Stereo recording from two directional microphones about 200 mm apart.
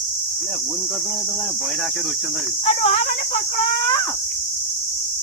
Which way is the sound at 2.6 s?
30° left (ahead or behind).